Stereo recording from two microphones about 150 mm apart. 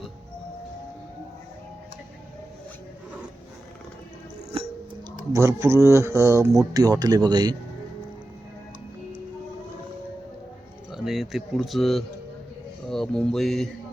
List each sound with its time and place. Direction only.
5.3 s speech: 20° right (ahead or behind)
10.9 s speech: centre (ahead or behind)
12.9 s mantra: 5° left (ahead or behind)